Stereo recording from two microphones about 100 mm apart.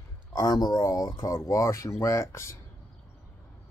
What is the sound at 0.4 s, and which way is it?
Speech, 40° left (ahead or behind).